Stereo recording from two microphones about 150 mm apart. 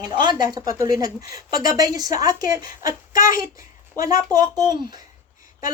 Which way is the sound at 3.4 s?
20° right (ahead or behind).